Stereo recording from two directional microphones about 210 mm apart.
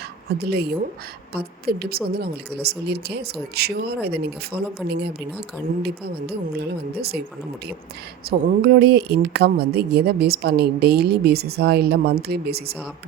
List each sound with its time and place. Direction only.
0.3 s speech: 50° right (ahead or behind)
8.3 s speech: 50° right (ahead or behind)